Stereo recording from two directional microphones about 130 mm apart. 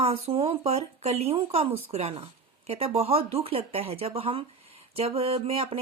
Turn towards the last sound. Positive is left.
turn(degrees=-50)  # may be behind; listen again after turning